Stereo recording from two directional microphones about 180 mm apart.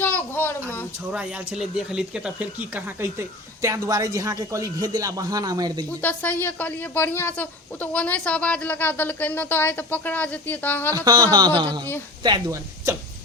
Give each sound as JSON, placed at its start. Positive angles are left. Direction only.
{"t": 0.0, "sound": "a sound", "side_deg": 10}
{"t": 1.1, "sound": "speech", "side_deg": -5}
{"t": 6.0, "sound": "a woman's voice", "side_deg": 10}
{"t": 10.9, "sound": "a man's voice", "side_deg": -20}